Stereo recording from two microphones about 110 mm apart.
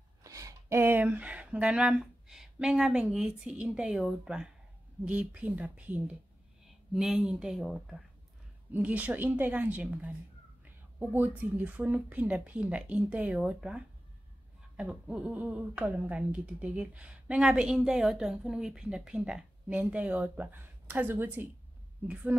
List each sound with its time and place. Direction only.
0.2 s speech: 30° right (ahead or behind)
6.9 s speech: 5° right (ahead or behind)
8.7 s speech: 15° right (ahead or behind)